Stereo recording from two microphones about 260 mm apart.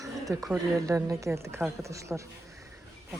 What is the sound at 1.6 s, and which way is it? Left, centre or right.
Speech, centre.